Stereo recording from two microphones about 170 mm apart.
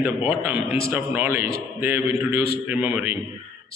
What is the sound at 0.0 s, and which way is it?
A man's voice, 10° right (ahead or behind).